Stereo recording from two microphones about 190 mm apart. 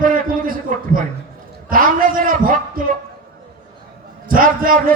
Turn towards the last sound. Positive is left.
turn(degrees=-45)  # may be behind; listen again after turning